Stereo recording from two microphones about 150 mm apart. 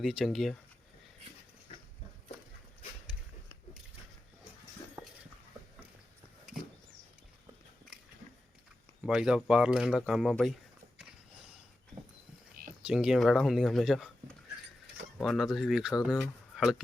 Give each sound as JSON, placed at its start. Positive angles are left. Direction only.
{"t": 0.0, "sound": "speech", "side_deg": 0}
{"t": 5.0, "sound": "a sound", "side_deg": -15}
{"t": 9.0, "sound": "speech", "side_deg": -5}
{"t": 12.8, "sound": "a man's voice", "side_deg": -5}